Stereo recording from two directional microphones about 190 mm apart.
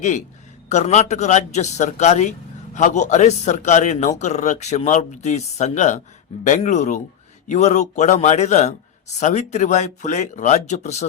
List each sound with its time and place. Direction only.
0.7 s a man's voice: 35° left (ahead or behind)